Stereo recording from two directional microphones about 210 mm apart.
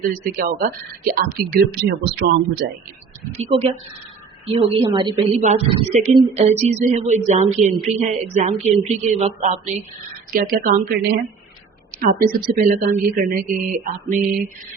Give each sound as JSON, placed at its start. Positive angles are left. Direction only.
{"t": 0.1, "sound": "speech", "side_deg": -40}
{"t": 3.3, "sound": "a woman's voice", "side_deg": -30}